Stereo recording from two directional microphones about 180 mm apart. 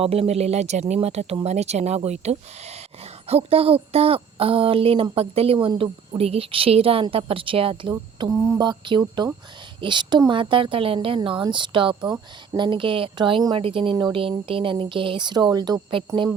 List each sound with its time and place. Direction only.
0.0 s speech: 35° right (ahead or behind)